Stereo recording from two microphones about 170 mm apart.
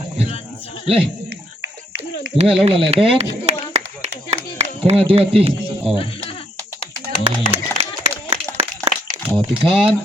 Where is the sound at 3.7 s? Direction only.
40° right (ahead or behind).